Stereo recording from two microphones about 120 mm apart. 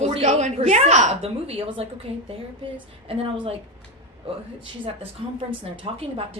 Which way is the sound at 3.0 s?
55° right (ahead or behind).